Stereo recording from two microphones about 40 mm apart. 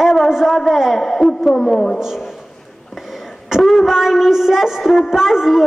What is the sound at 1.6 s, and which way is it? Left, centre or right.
Speech, centre.